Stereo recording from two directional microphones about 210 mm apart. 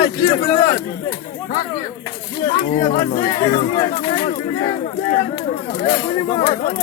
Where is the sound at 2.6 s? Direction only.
35° left (ahead or behind).